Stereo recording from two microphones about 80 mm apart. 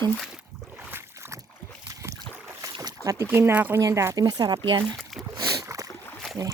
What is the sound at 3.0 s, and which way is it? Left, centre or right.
Speech, right.